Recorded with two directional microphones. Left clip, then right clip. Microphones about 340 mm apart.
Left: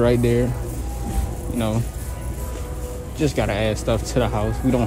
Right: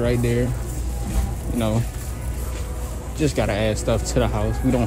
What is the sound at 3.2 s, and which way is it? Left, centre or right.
Speech, centre.